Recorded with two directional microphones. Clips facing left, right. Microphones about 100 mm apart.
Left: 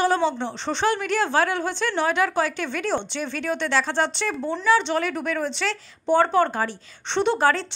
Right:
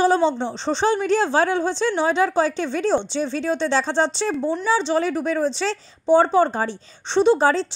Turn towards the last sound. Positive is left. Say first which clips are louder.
# right 4 dB
turn(degrees=-20)  # may be behind; listen again after turning